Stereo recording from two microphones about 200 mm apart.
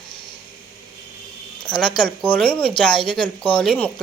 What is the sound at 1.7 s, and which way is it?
Speech, 20° left (ahead or behind).